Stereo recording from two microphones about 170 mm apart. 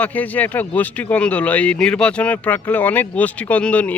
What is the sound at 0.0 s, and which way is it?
Speech, 10° left (ahead or behind).